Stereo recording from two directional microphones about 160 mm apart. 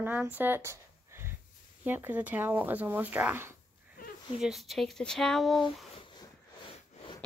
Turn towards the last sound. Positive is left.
turn(degrees=30)  # may be behind; listen again after turning